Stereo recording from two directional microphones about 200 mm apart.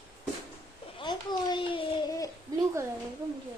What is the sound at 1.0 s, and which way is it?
A child's voice, 20° left (ahead or behind).